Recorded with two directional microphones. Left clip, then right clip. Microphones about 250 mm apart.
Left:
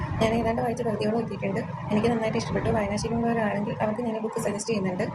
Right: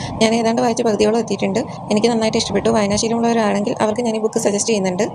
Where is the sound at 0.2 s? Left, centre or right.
Right.